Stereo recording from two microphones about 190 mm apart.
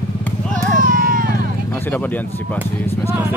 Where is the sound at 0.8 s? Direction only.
45° right (ahead or behind).